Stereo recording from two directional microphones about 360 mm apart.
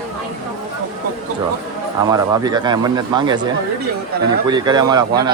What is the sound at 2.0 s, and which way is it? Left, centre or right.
Speech, centre.